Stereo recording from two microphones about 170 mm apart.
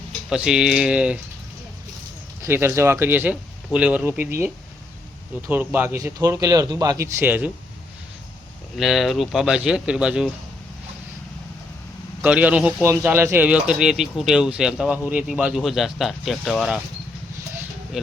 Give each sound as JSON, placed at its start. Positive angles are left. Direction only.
{"t": 0.3, "sound": "speech", "side_deg": -5}
{"t": 2.4, "sound": "speech", "side_deg": -15}
{"t": 8.8, "sound": "speech", "side_deg": 0}
{"t": 12.2, "sound": "speech", "side_deg": -10}
{"t": 18.0, "sound": "speech", "side_deg": 0}